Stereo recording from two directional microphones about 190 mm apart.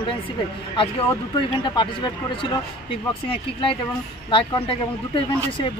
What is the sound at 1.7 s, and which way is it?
Speech, 25° left (ahead or behind).